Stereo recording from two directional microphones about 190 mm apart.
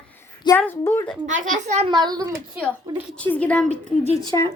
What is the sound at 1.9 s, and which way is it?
Speech, 20° right (ahead or behind).